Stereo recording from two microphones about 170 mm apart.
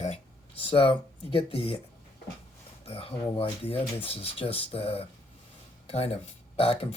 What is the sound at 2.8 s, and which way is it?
Speech, 35° left (ahead or behind).